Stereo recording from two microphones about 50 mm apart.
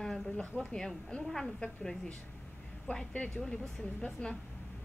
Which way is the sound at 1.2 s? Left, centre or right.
Centre.